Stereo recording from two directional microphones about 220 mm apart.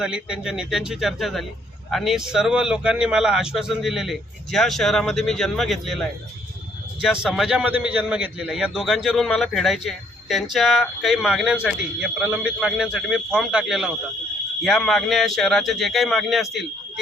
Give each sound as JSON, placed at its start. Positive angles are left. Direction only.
{"t": 0.0, "sound": "a man's voice", "side_deg": -5}